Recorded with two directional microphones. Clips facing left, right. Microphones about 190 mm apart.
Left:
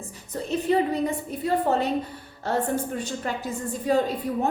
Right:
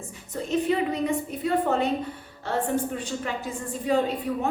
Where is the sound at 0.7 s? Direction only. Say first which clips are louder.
Left 4 dB; 35° left (ahead or behind).